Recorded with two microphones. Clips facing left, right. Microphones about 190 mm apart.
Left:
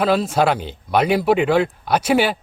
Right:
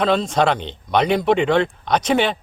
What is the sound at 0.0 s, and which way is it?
Speech, 5° left (ahead or behind).